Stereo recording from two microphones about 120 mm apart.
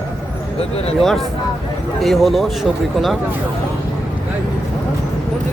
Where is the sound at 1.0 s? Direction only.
Centre (ahead or behind).